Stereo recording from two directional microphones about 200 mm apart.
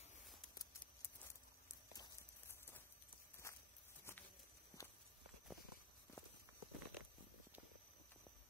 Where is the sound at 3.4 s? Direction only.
15° left (ahead or behind).